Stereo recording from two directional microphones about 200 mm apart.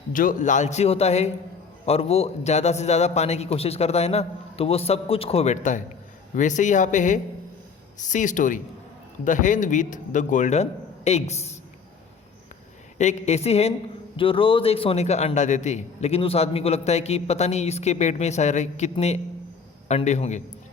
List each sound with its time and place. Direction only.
0.1 s a man's voice: 40° left (ahead or behind)
13.0 s a man's voice: 35° left (ahead or behind)